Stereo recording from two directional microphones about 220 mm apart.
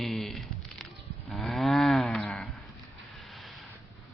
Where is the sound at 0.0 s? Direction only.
Centre (ahead or behind).